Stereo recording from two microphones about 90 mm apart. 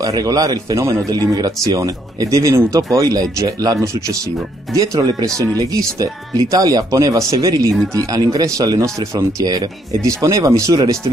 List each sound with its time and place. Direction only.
0.0 s speech: 45° right (ahead or behind)